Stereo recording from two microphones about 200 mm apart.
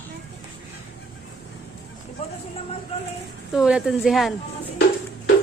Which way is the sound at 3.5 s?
5° right (ahead or behind).